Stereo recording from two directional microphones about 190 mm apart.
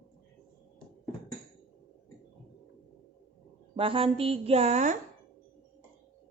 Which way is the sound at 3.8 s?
30° right (ahead or behind).